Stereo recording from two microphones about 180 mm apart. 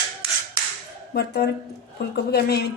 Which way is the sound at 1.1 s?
65° left (ahead or behind).